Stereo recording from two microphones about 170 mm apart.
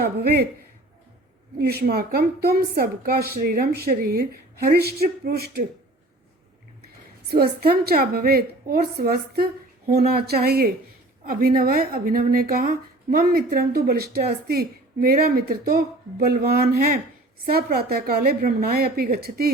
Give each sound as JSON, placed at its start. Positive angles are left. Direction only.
{"t": 0.0, "sound": "speech", "side_deg": -65}
{"t": 1.5, "sound": "a woman's voice", "side_deg": -70}
{"t": 7.3, "sound": "a woman's voice", "side_deg": -65}